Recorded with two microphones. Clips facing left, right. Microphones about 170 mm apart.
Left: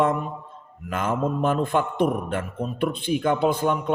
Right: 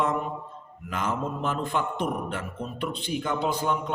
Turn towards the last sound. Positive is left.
turn(degrees=55)  # may be behind; listen again after turning